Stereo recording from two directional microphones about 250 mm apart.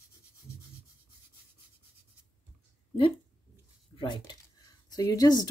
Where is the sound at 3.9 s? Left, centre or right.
Centre.